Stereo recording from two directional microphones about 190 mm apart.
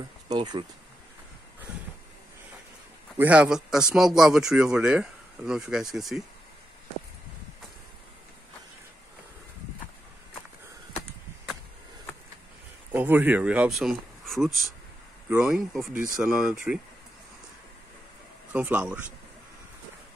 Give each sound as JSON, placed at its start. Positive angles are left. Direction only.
{"t": 0.3, "sound": "speech", "side_deg": -25}
{"t": 3.2, "sound": "speech", "side_deg": -5}
{"t": 12.9, "sound": "speech", "side_deg": -10}
{"t": 18.5, "sound": "speech", "side_deg": -5}